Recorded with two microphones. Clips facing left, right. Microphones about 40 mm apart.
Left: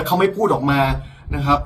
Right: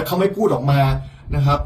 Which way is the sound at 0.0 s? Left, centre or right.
Left.